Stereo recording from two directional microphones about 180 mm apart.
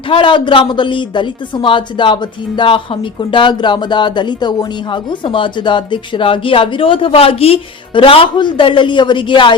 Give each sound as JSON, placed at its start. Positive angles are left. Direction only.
{"t": 0.1, "sound": "a woman's voice", "side_deg": 25}